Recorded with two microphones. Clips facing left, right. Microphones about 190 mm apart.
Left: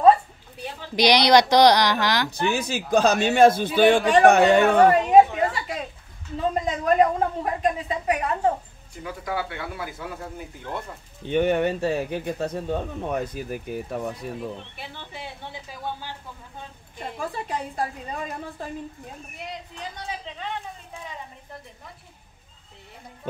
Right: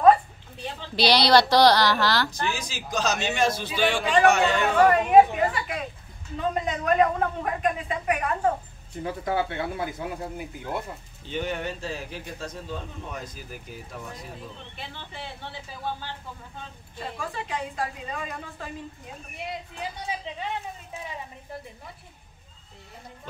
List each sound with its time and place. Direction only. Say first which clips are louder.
0.6 s a woman's voice: left 3 dB; 10° left (ahead or behind)
2.5 s speech: left 9 dB; 60° left (ahead or behind)
4.8 s a sound: left 2 dB; 30° left (ahead or behind)
6.6 s a woman's voice: left 2 dB; 30° left (ahead or behind)
9.0 s speech: right 3 dB; 30° right (ahead or behind); by 10.8 s 10° right (ahead or behind)
11.2 s speech: left 9 dB; 60° left (ahead or behind)
14.8 s a woman's voice: left 1 dB; 15° left (ahead or behind)
17.5 s a woman's voice: left 2 dB; 35° left (ahead or behind)